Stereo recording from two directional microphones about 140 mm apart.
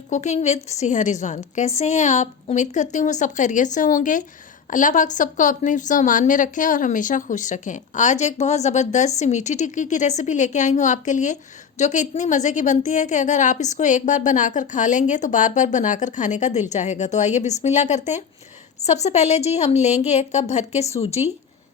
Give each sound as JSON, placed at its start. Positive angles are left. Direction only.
{"t": 0.1, "sound": "a woman's voice", "side_deg": 55}